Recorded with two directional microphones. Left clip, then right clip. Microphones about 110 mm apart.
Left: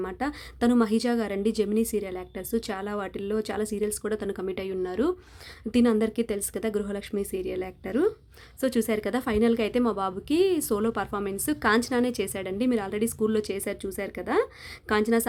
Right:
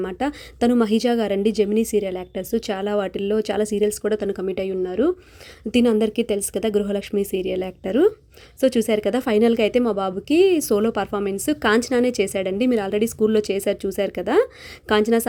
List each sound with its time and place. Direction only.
0.0 s a woman's voice: 20° right (ahead or behind)
4.8 s a woman's voice: 15° right (ahead or behind)